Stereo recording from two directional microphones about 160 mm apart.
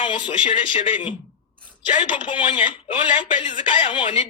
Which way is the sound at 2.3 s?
30° left (ahead or behind).